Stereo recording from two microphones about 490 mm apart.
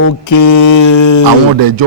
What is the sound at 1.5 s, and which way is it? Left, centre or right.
Speech, right.